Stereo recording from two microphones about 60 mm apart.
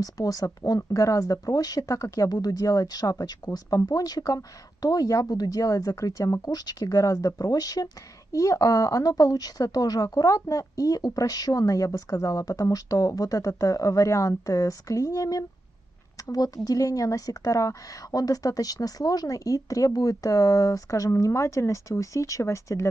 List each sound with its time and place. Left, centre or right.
0.0 s speech: left
2.4 s speech: left
6.4 s speech: left